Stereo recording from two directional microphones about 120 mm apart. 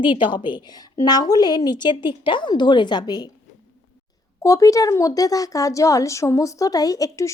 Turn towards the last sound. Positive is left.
turn(degrees=30)  # may be behind; listen again after turning